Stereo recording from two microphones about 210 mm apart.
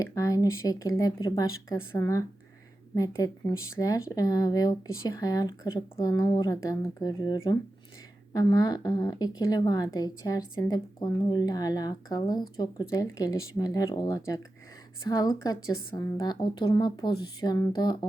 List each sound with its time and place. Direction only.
0.0 s a woman's voice: 15° left (ahead or behind)